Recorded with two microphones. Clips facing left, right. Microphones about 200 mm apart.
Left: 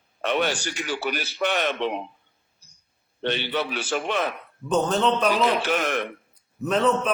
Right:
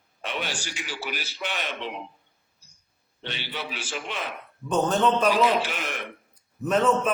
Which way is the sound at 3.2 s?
60° left (ahead or behind).